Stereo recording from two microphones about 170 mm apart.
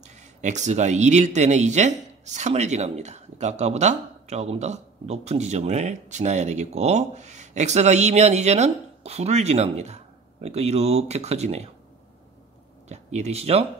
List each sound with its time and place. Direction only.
0.0 s speech: 45° right (ahead or behind)
12.8 s speech: 40° right (ahead or behind)